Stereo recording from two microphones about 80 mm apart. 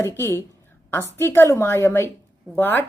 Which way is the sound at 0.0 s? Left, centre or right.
Left.